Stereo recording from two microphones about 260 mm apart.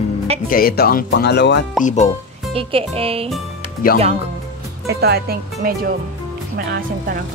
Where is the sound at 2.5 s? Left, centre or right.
Right.